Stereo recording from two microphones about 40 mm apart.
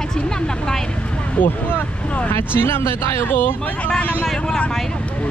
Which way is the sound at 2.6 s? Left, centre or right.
Left.